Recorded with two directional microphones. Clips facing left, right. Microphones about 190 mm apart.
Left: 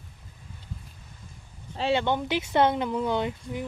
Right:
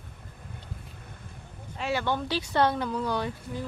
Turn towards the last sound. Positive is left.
turn(degrees=20)  # may be behind; listen again after turning